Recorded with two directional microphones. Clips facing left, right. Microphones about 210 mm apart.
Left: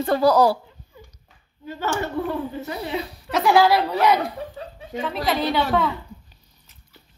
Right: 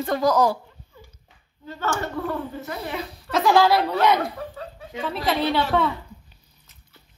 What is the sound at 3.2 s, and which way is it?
Speech, 5° left (ahead or behind).